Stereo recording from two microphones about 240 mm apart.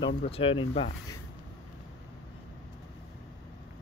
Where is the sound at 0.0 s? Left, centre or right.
Left.